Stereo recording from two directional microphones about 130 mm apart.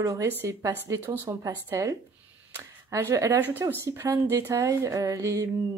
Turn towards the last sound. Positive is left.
turn(degrees=-25)  # may be behind; listen again after turning